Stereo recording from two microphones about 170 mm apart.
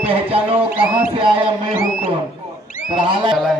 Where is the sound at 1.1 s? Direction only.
30° right (ahead or behind).